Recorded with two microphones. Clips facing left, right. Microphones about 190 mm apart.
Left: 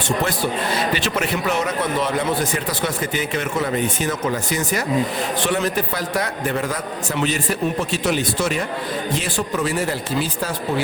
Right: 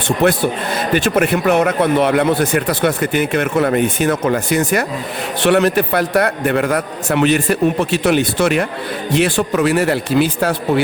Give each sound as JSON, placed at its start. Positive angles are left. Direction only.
{"t": 0.2, "sound": "a man's voice", "side_deg": -55}